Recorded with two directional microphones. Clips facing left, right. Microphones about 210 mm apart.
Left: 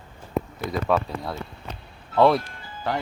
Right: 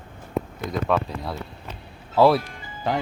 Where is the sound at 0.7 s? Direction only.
Centre (ahead or behind).